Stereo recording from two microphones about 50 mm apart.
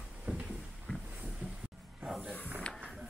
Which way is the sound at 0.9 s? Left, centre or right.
Left.